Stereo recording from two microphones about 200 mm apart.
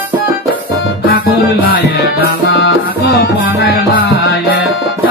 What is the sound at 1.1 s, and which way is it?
Music, 50° left (ahead or behind).